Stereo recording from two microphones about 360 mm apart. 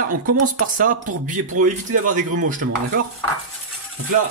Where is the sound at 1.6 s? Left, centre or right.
Right.